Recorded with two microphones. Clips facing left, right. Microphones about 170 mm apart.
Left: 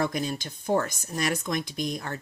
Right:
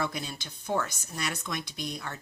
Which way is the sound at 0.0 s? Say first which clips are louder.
Left 6 dB; 45° left (ahead or behind).